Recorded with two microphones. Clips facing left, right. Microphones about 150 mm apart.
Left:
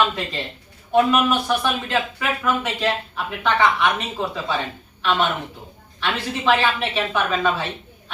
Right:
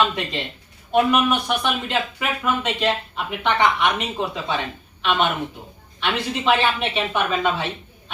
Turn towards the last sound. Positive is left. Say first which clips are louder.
# even
turn(degrees=-15)  # may be behind; listen again after turning